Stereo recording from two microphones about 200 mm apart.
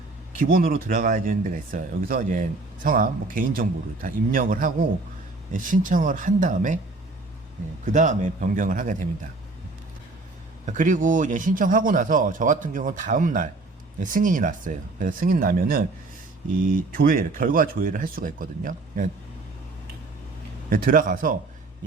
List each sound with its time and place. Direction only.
0.3 s speech: 45° right (ahead or behind)
7.9 s speech: 40° right (ahead or behind)
10.7 s speech: 40° right (ahead or behind)
20.7 s speech: 45° right (ahead or behind)